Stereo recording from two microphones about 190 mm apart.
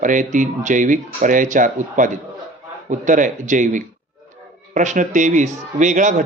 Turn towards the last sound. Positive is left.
turn(degrees=-40)  # may be behind; listen again after turning